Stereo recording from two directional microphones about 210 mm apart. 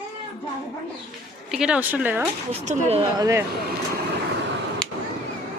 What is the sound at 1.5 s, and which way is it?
Speech, 5° right (ahead or behind).